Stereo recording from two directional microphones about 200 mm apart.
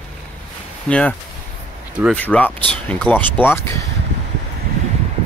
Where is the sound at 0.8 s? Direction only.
5° left (ahead or behind).